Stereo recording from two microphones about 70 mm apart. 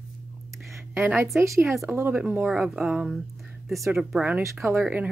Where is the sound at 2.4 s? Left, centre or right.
Centre.